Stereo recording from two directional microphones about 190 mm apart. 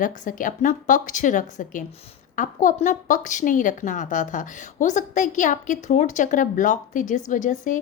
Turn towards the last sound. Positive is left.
turn(degrees=40)  # may be behind; listen again after turning